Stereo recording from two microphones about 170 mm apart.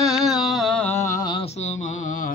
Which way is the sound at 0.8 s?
15° left (ahead or behind).